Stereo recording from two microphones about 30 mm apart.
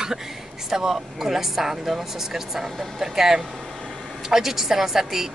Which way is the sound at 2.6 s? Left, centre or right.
Centre.